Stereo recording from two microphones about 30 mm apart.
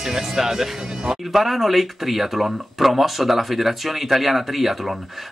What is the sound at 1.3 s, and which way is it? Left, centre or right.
Speech, centre.